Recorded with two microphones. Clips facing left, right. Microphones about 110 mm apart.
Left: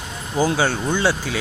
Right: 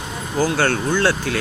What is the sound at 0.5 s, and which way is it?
Speech, 10° left (ahead or behind).